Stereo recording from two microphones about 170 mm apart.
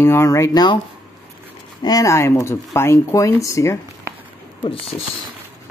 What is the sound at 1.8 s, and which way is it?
Speech, 20° left (ahead or behind).